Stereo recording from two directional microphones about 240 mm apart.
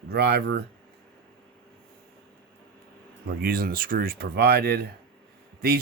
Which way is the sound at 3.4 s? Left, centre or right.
Right.